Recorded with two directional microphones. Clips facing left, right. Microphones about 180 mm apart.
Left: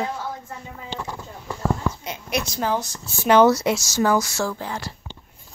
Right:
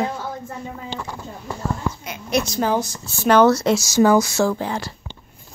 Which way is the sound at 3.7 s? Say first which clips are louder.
Right 5 dB; 10° right (ahead or behind).